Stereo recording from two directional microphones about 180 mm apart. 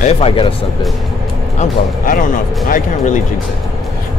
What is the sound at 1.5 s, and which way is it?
Speech, 45° left (ahead or behind).